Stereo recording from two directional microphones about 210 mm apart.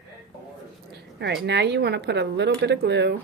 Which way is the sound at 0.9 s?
55° right (ahead or behind).